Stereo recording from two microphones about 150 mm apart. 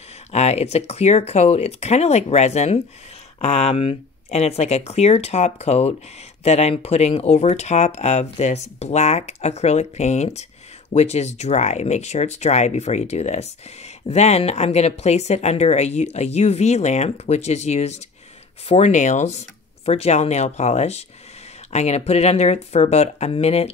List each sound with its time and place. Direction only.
0.3 s speech: 45° left (ahead or behind)